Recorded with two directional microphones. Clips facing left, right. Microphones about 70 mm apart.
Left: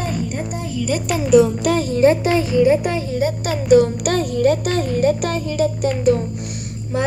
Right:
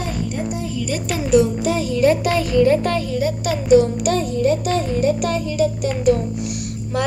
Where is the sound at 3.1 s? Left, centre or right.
Left.